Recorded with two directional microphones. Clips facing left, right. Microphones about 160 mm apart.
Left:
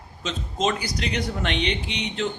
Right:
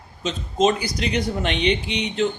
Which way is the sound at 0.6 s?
20° right (ahead or behind).